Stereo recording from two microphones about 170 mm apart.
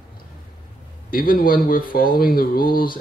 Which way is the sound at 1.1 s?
60° left (ahead or behind).